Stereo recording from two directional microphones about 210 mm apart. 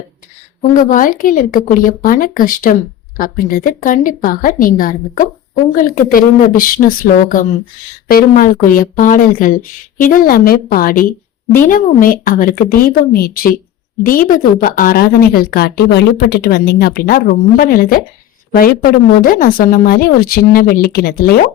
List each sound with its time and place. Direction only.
0.7 s a woman's voice: 40° left (ahead or behind)